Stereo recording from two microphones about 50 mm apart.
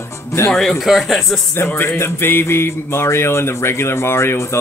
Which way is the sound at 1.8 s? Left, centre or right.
Left.